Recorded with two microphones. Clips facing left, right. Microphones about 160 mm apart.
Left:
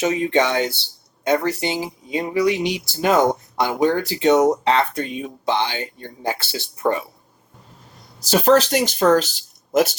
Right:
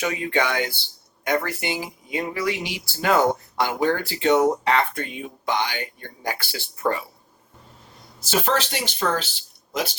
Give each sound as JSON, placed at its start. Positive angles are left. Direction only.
{"t": 0.0, "sound": "speech", "side_deg": 25}
{"t": 8.2, "sound": "speech", "side_deg": 40}